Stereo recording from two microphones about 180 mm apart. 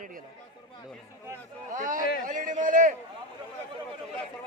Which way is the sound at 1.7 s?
45° right (ahead or behind).